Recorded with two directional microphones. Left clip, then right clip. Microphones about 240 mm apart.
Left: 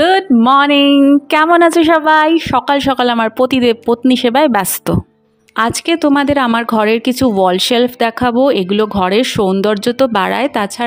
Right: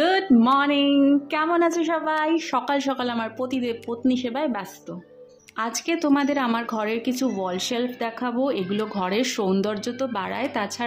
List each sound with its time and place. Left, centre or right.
0.0 s speech: left